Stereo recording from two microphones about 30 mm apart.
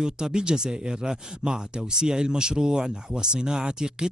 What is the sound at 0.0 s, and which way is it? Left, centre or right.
A man's voice, right.